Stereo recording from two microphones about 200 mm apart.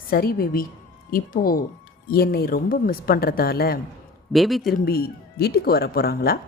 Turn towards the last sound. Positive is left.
turn(degrees=50)  # may be behind; listen again after turning